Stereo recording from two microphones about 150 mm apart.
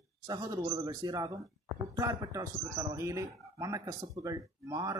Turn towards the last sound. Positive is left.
turn(degrees=-25)  # may be behind; listen again after turning